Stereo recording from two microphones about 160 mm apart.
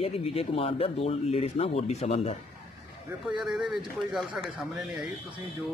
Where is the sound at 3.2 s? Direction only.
Centre (ahead or behind).